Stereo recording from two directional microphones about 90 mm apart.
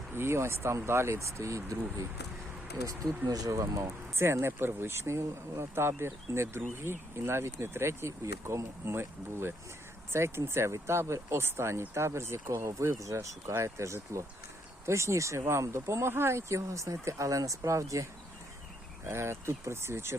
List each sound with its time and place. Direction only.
0.1 s speech: 25° right (ahead or behind)
3.2 s speech: 40° right (ahead or behind)